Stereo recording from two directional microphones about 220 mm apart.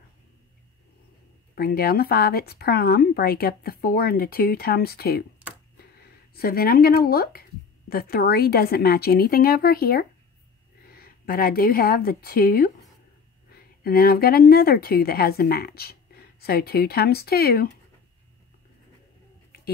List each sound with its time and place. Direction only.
1.5 s speech: 45° left (ahead or behind)
6.3 s a woman's voice: 45° left (ahead or behind)